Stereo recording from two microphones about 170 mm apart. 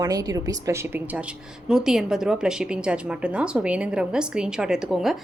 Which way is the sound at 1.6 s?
5° right (ahead or behind).